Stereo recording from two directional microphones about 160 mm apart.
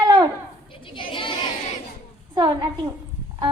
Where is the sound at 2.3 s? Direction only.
30° right (ahead or behind).